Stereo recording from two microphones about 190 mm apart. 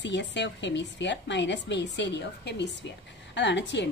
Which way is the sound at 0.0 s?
70° left (ahead or behind).